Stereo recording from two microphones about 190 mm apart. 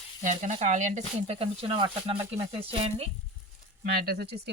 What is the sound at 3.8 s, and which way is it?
Speech, 55° right (ahead or behind).